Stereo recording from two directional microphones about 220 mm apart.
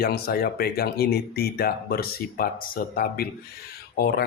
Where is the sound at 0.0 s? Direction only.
45° left (ahead or behind).